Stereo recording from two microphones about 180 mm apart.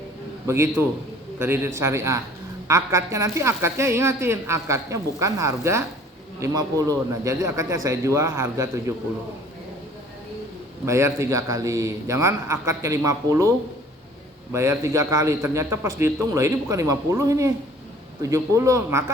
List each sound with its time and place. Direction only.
0.4 s a woman's voice: 15° right (ahead or behind)
10.8 s a woman's voice: 15° right (ahead or behind)
14.5 s a woman's voice: 15° right (ahead or behind)